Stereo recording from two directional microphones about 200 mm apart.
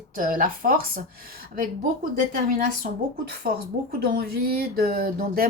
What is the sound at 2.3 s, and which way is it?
Speech, 45° right (ahead or behind).